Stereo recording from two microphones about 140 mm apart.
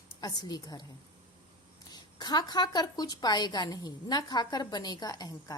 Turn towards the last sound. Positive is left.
turn(degrees=25)  # may be behind; listen again after turning